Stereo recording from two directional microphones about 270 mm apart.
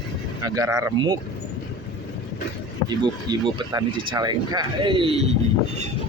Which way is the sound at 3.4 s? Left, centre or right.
Centre.